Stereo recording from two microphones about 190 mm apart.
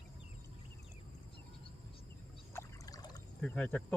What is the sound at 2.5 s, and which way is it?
Trickle, 20° left (ahead or behind).